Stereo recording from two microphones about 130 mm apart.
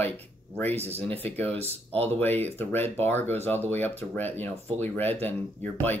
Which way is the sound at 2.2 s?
15° left (ahead or behind).